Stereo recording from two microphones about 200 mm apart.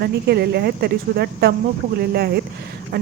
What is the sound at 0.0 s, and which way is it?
Speech, 55° right (ahead or behind).